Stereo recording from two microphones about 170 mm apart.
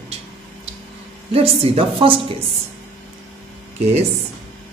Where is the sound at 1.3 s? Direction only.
35° right (ahead or behind).